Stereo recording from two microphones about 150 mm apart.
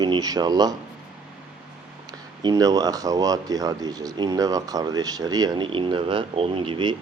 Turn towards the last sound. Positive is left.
turn(degrees=-35)  # may be behind; listen again after turning